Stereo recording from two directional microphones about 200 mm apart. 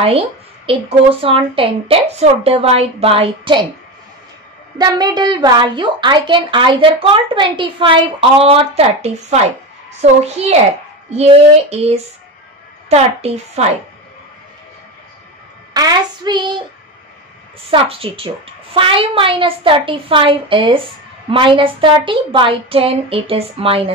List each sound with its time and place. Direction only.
0.7 s a woman's voice: 30° right (ahead or behind)
4.7 s a woman's voice: 20° right (ahead or behind)
15.7 s a woman's voice: 20° right (ahead or behind)
17.6 s a woman's voice: 30° right (ahead or behind)